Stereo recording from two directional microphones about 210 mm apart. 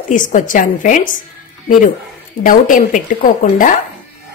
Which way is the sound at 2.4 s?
40° left (ahead or behind).